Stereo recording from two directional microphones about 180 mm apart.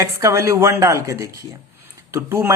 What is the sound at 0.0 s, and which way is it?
Speech, 15° right (ahead or behind).